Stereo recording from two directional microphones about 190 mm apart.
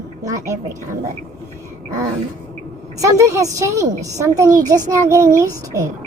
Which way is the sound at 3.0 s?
15° right (ahead or behind).